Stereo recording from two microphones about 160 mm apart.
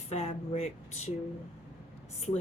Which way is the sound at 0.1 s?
45° left (ahead or behind).